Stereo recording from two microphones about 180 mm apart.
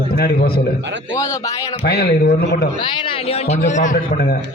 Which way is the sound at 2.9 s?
30° left (ahead or behind).